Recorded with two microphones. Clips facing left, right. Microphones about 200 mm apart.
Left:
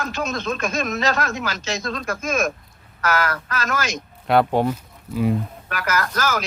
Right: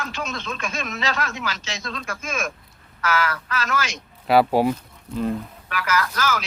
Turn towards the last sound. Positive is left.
turn(degrees=45)  # may be behind; listen again after turning